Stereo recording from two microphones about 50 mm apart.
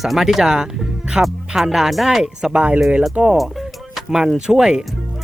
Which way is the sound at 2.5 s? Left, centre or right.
Right.